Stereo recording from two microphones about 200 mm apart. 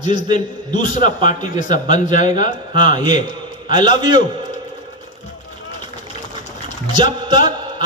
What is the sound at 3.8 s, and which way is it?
Speech, 20° right (ahead or behind).